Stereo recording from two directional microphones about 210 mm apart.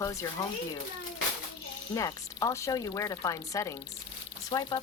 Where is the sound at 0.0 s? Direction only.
15° left (ahead or behind).